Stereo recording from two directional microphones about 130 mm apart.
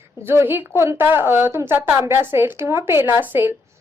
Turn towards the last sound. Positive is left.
turn(degrees=-15)  # may be behind; listen again after turning